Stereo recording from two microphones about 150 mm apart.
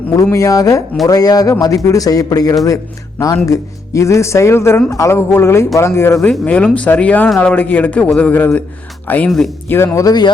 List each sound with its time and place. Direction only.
0.1 s speech: 20° left (ahead or behind)
6.3 s speech: 5° left (ahead or behind)
9.6 s speech: 15° left (ahead or behind)